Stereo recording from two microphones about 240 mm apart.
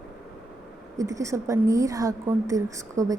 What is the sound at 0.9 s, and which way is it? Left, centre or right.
A woman's voice, centre.